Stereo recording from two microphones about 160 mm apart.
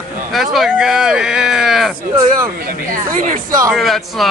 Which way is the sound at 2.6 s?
60° right (ahead or behind).